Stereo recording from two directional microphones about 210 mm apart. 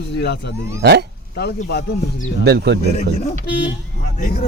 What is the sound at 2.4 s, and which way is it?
Speech, 50° right (ahead or behind).